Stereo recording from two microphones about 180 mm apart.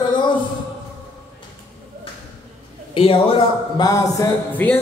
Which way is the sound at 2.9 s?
30° left (ahead or behind).